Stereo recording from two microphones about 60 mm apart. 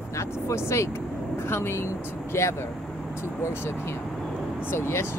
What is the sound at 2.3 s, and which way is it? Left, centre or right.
Speech, left.